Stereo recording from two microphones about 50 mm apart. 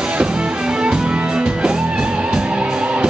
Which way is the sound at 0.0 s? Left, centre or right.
Centre.